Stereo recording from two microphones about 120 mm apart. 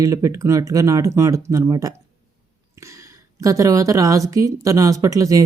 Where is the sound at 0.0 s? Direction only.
25° right (ahead or behind).